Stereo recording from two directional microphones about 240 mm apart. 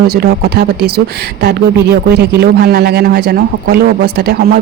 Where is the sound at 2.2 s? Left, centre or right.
Right.